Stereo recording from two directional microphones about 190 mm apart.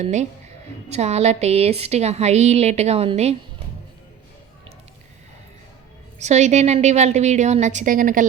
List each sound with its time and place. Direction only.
0.0 s a woman's voice: 35° right (ahead or behind)
6.1 s a woman's voice: 35° right (ahead or behind)